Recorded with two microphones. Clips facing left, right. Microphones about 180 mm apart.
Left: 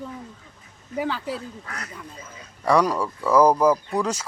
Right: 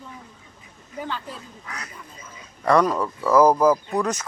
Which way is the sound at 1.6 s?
50° left (ahead or behind).